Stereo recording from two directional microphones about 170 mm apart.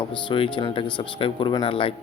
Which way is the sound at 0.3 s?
30° left (ahead or behind).